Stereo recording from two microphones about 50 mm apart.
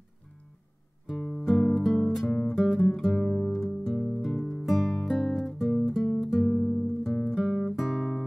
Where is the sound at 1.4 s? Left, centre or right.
Centre.